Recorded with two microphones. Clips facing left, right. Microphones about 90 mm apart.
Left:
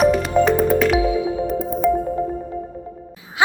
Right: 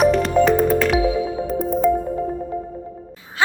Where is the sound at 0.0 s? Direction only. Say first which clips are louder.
Even; centre (ahead or behind).